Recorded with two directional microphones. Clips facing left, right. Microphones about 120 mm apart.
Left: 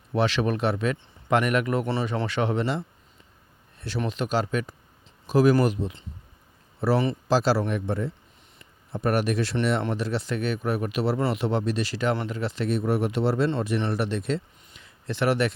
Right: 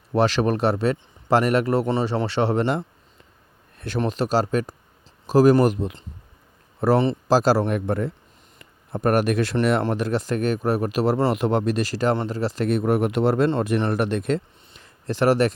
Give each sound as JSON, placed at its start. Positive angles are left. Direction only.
{"t": 0.1, "sound": "speech", "side_deg": -40}
{"t": 2.6, "sound": "a man's voice", "side_deg": -50}
{"t": 4.0, "sound": "a man's voice", "side_deg": -35}
{"t": 7.7, "sound": "speech", "side_deg": -55}
{"t": 12.6, "sound": "speech", "side_deg": -55}